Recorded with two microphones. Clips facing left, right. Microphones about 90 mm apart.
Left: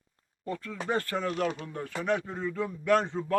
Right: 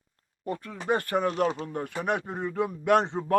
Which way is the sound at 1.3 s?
30° right (ahead or behind).